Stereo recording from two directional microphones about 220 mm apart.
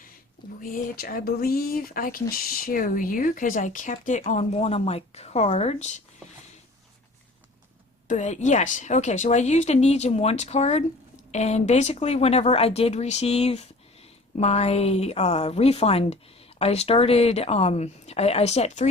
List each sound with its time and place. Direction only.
0.7 s speech: 40° left (ahead or behind)
8.0 s speech: 30° left (ahead or behind)